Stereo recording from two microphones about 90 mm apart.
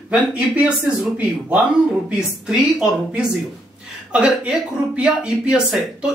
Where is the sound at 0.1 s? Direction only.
10° right (ahead or behind).